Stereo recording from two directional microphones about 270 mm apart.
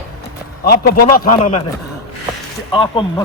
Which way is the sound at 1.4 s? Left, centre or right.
Left.